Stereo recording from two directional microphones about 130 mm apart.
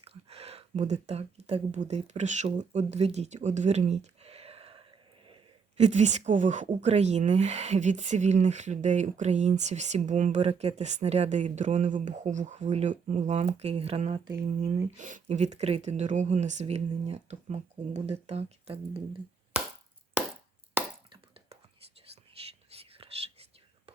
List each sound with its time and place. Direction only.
0.0 s speech: 50° right (ahead or behind)
5.7 s speech: 60° right (ahead or behind)
14.8 s speech: 70° right (ahead or behind); by 19.0 s 50° right (ahead or behind)
22.4 s whispering: 50° right (ahead or behind)